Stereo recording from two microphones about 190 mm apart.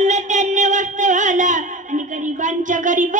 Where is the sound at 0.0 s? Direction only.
40° right (ahead or behind).